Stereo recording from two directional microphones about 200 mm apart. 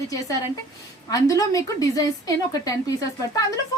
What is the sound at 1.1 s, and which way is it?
A woman's voice, 15° left (ahead or behind).